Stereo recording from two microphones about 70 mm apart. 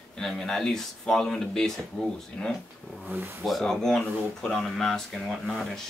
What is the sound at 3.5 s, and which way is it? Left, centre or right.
Speech, centre.